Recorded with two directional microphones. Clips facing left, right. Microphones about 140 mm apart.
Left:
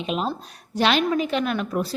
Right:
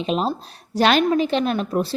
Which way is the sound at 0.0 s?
35° right (ahead or behind).